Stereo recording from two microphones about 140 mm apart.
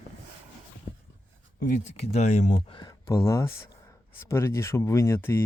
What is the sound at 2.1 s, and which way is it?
Speech, 55° left (ahead or behind).